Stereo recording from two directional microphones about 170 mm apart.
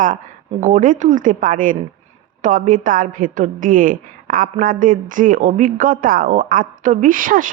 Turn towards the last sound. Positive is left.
turn(degrees=-55)  # may be behind; listen again after turning